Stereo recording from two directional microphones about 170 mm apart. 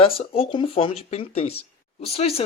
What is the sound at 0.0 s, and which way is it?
Speech, 35° left (ahead or behind).